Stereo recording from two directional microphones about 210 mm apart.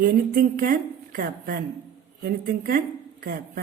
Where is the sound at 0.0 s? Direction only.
40° right (ahead or behind).